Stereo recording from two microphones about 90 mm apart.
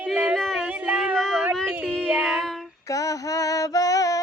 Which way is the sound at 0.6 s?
15° right (ahead or behind).